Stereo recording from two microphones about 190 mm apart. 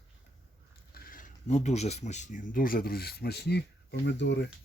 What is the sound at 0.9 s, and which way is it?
Speech, 45° left (ahead or behind).